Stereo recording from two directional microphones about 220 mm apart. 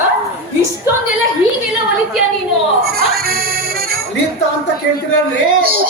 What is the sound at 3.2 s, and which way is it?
Accordion, 45° right (ahead or behind).